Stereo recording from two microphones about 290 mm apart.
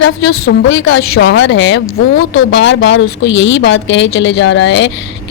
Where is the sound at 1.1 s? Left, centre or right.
Left.